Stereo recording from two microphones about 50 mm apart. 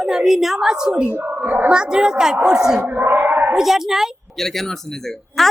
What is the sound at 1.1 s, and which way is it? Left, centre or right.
Speech, right.